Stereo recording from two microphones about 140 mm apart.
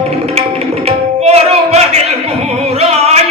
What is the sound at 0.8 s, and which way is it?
Tabla, 50° right (ahead or behind).